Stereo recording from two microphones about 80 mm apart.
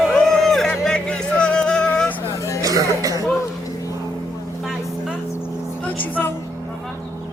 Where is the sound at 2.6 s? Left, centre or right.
Right.